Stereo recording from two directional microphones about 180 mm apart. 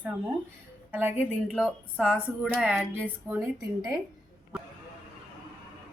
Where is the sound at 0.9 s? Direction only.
10° right (ahead or behind).